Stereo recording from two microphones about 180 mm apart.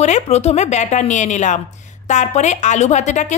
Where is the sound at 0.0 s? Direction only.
40° left (ahead or behind).